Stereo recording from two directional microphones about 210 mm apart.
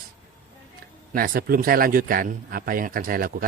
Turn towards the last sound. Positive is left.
turn(degrees=-40)  # may be behind; listen again after turning